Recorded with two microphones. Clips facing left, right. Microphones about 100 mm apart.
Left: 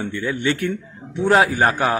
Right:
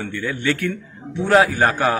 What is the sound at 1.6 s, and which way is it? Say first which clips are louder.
Speech: even; 20° left (ahead or behind).